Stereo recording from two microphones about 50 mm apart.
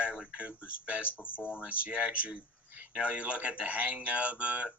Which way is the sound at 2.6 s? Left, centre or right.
Right.